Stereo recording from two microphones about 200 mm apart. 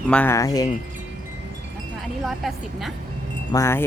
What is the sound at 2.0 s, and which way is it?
Speech, centre (ahead or behind).